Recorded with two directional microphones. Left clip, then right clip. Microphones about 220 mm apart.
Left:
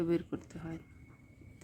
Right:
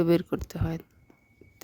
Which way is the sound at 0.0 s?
50° right (ahead or behind).